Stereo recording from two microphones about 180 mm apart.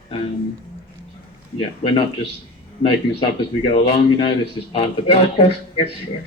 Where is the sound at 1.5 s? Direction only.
25° left (ahead or behind).